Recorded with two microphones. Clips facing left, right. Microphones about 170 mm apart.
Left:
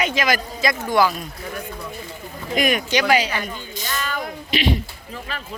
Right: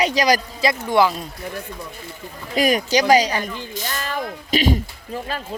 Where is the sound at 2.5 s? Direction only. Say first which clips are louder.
Right 2 dB; 35° right (ahead or behind).